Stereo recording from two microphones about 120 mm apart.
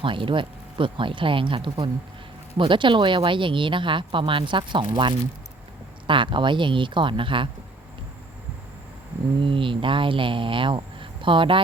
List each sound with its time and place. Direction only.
0.0 s speech: 45° right (ahead or behind)
9.4 s speech: 45° right (ahead or behind)